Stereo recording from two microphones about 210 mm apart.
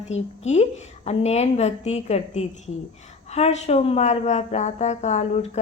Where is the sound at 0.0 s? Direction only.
30° left (ahead or behind).